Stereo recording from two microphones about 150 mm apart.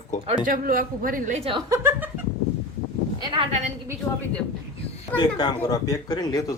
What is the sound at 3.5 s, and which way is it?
Speech, 50° right (ahead or behind).